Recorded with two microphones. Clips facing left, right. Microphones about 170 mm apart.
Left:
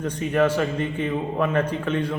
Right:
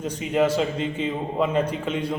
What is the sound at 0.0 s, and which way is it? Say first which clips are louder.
A man's voice: left 1 dB; 15° right (ahead or behind).